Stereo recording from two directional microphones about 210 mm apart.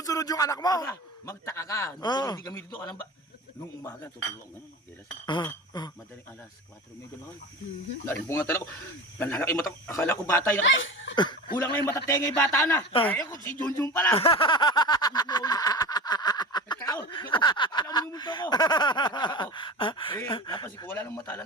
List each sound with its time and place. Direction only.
0.0 s a man's voice: 15° left (ahead or behind)
5.2 s snicker: 20° left (ahead or behind)
8.0 s a man's voice: 10° left (ahead or behind)
10.6 s speech: 65° left (ahead or behind)
11.1 s a man's voice: 20° left (ahead or behind)
14.2 s a sound: 25° left (ahead or behind)
17.3 s snicker: 20° left (ahead or behind)
20.7 s a man's voice: 10° left (ahead or behind)